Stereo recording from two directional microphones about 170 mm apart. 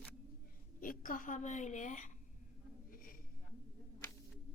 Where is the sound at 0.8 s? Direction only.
55° left (ahead or behind).